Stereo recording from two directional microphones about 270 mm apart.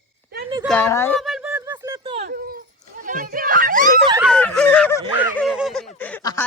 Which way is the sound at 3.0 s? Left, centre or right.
Right.